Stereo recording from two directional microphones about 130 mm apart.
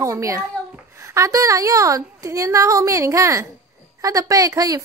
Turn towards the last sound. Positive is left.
turn(degrees=-30)  # may be behind; listen again after turning